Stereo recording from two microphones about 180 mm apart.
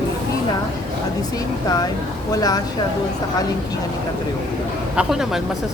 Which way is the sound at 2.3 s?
20° left (ahead or behind).